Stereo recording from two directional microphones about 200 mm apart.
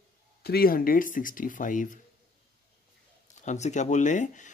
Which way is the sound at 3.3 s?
35° left (ahead or behind).